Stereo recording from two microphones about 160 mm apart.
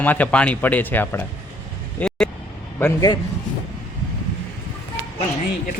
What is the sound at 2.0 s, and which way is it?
Vehicle, 10° left (ahead or behind).